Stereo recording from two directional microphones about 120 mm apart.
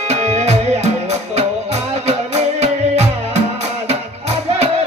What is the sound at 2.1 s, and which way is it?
Music, 65° right (ahead or behind).